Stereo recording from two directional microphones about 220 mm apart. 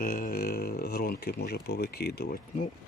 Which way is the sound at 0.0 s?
40° left (ahead or behind).